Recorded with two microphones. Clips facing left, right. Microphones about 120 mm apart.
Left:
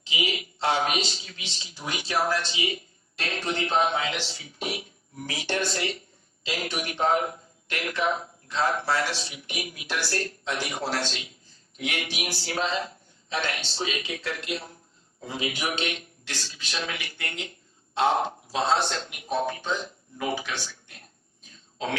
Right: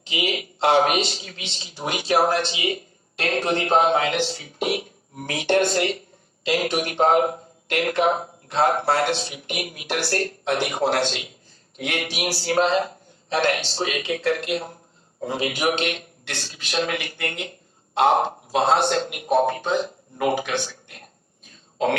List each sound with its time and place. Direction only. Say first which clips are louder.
0.0 s a man's voice: right 4 dB; 55° right (ahead or behind)